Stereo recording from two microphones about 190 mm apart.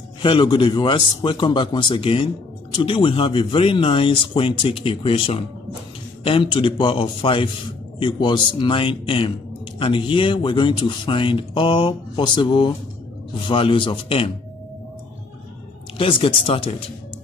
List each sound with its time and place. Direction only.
0.2 s speech: 25° left (ahead or behind)
16.0 s speech: 25° left (ahead or behind)